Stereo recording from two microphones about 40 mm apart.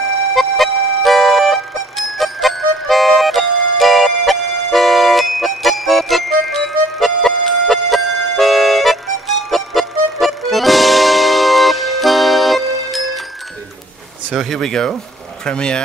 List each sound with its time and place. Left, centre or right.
0.4 s music: centre
14.6 s speech: centre